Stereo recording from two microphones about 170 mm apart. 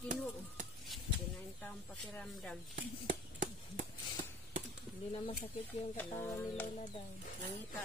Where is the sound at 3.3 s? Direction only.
50° right (ahead or behind).